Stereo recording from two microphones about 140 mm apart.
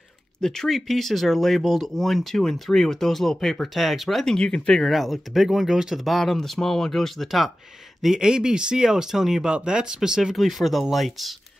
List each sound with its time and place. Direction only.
0.4 s speech: centre (ahead or behind)